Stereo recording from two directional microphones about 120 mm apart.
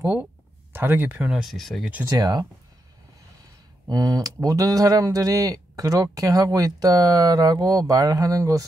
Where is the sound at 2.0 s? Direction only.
30° right (ahead or behind).